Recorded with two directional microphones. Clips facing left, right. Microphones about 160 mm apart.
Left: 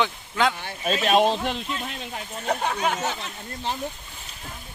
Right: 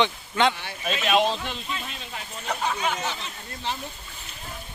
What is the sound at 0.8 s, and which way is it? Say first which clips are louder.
Speech: left 3 dB; 35° left (ahead or behind).